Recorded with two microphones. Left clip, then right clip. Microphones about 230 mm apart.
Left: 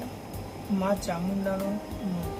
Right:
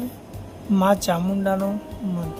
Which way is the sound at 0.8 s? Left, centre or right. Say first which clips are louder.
Right 9 dB; right.